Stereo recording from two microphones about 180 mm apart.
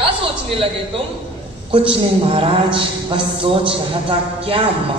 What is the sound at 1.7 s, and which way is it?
A woman's voice, 30° right (ahead or behind).